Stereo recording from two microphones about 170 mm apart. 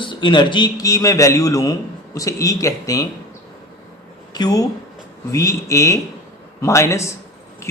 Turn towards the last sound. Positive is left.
turn(degrees=15)  # may be behind; listen again after turning